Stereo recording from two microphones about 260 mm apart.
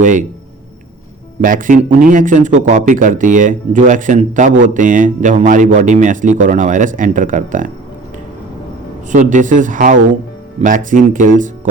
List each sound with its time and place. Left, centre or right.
0.0 s speech: right
1.4 s speech: right
9.1 s speech: right